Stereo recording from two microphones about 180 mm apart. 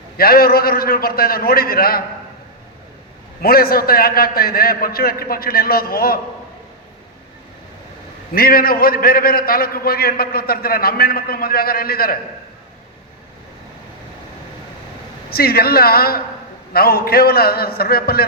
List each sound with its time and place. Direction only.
0.2 s a man's voice: 55° left (ahead or behind)
3.4 s a man's voice: 55° left (ahead or behind)
8.3 s a man's voice: 55° left (ahead or behind)
15.3 s a man's voice: 55° left (ahead or behind)